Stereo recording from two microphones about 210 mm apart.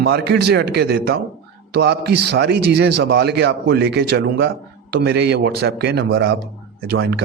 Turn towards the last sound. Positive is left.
turn(degrees=-50)  # may be behind; listen again after turning